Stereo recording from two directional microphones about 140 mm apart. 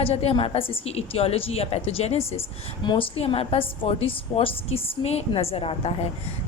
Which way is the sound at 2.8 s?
30° left (ahead or behind).